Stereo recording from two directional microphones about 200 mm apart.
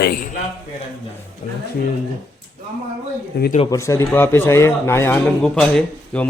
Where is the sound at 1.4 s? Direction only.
40° left (ahead or behind).